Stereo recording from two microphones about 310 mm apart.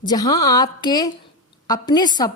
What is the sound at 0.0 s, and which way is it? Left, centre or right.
A woman's voice, centre.